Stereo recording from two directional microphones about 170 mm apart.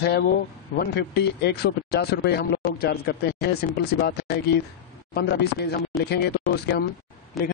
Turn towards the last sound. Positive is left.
turn(degrees=0)  # may be behind; listen again after turning